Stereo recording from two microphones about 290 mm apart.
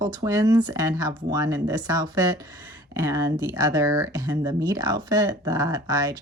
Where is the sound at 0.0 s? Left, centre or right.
Centre.